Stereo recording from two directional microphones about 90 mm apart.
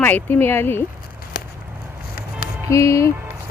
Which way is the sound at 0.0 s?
20° left (ahead or behind).